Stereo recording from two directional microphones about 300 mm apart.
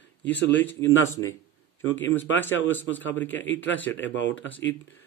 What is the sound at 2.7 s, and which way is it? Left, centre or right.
Speech, centre.